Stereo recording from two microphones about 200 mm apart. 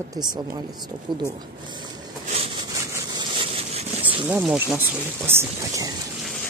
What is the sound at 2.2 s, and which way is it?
Wood, 30° right (ahead or behind).